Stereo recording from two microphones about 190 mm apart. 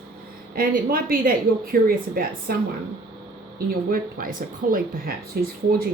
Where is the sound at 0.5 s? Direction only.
50° right (ahead or behind).